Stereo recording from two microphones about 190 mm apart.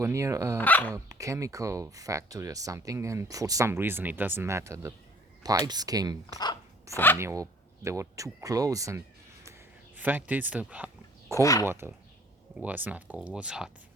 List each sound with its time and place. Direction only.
0.0 s speech: 15° right (ahead or behind)
0.6 s speech: 10° left (ahead or behind)
0.9 s speech: 15° right (ahead or behind)
6.9 s speech: 10° left (ahead or behind)
7.2 s speech: 15° right (ahead or behind)
9.4 s a sound: 10° right (ahead or behind)
11.3 s speech: 15° left (ahead or behind)
11.6 s speech: 15° right (ahead or behind)